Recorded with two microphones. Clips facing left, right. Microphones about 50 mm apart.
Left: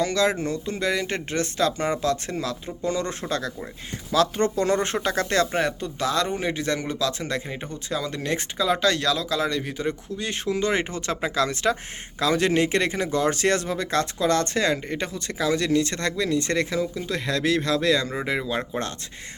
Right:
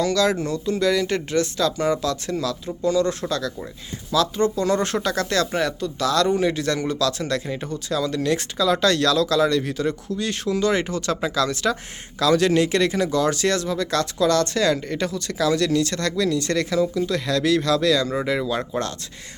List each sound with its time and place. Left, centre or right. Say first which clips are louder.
0.0 s speech: right 2 dB; left
4.1 s speech: right 1 dB; left
5.0 s speech: even; left
8.8 s speech: right 4 dB; centre